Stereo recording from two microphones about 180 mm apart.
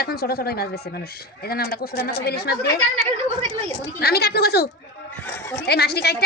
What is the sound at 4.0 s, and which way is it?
Speech, 60° left (ahead or behind).